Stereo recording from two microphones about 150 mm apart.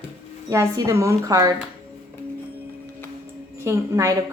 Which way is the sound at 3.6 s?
20° right (ahead or behind).